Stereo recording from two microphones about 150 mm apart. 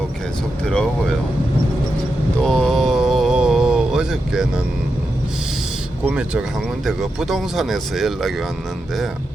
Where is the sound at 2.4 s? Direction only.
5° left (ahead or behind).